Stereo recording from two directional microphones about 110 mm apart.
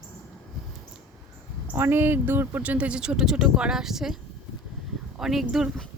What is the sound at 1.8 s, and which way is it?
Speech, 20° right (ahead or behind).